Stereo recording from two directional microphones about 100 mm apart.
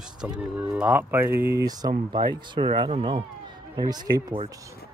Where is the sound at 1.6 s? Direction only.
40° right (ahead or behind).